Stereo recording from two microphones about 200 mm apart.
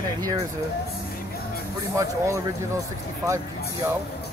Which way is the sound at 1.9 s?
15° right (ahead or behind).